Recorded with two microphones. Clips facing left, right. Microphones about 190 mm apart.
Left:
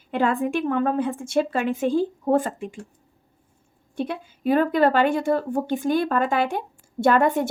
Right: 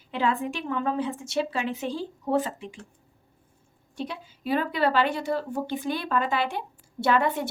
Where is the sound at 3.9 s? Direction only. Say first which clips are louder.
Left 6 dB; 55° left (ahead or behind).